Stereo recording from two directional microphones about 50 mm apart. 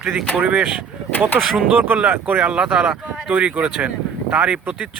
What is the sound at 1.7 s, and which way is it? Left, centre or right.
Speech, right.